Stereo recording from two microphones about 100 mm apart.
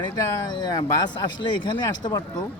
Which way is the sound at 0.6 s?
45° left (ahead or behind).